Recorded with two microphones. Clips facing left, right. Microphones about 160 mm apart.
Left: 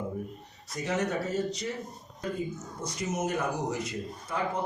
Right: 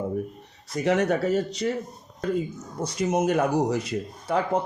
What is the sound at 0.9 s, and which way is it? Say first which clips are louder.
Speech: right 8 dB; 70° right (ahead or behind).